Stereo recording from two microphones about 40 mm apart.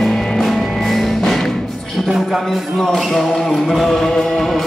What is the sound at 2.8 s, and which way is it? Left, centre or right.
Music, centre.